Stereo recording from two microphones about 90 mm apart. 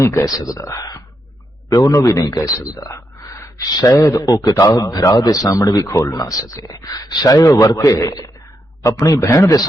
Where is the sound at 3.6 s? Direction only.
50° left (ahead or behind).